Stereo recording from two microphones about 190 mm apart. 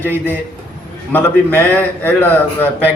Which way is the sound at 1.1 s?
10° left (ahead or behind).